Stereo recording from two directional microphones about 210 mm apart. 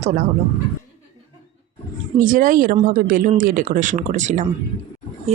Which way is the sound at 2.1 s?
40° right (ahead or behind).